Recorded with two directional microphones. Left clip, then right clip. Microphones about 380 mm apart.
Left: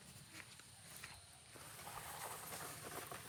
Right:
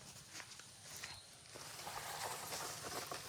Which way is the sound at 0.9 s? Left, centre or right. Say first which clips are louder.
Right 5 dB; centre.